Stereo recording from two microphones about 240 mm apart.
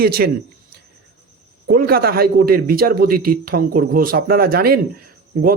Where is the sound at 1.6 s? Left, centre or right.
Right.